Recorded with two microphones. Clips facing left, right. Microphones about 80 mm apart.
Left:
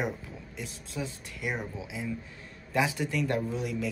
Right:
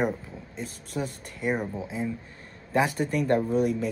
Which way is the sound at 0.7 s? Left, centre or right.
Right.